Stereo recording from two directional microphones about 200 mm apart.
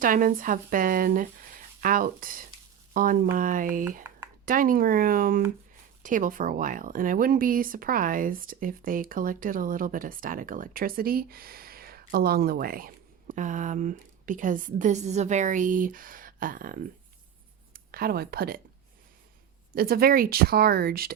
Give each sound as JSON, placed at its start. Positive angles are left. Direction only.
{"t": 0.0, "sound": "speech", "side_deg": -45}
{"t": 19.7, "sound": "speech", "side_deg": -50}